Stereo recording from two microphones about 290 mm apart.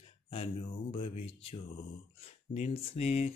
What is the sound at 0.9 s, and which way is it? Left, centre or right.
Mantra, centre.